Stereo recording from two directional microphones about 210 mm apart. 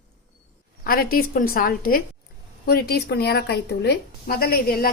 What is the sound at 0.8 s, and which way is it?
A woman's voice, 45° left (ahead or behind).